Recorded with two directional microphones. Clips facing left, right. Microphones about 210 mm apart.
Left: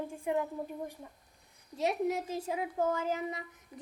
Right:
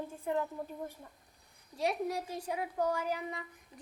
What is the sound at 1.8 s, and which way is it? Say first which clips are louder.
Speech: left 3 dB; 20° left (ahead or behind).